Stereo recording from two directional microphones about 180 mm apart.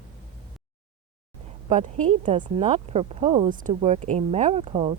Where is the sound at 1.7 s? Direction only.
45° right (ahead or behind).